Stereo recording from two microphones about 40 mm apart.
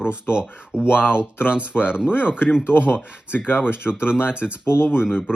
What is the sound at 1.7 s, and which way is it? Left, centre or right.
Speech, left.